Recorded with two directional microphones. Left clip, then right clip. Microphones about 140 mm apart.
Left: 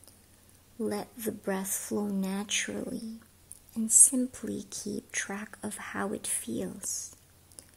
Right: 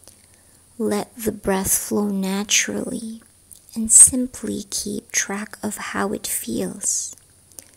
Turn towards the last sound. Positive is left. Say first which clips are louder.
# right 10 dB
turn(degrees=-25)  # may be behind; listen again after turning